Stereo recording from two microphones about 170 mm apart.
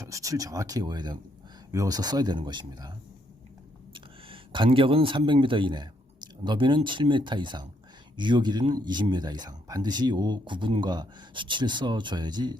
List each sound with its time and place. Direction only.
0.0 s speech: 20° right (ahead or behind)
3.9 s speech: 30° right (ahead or behind)